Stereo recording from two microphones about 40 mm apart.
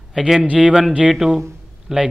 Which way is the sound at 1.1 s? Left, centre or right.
Centre.